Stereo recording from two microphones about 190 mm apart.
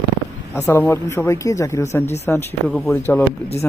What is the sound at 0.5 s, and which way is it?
Speech, 10° left (ahead or behind).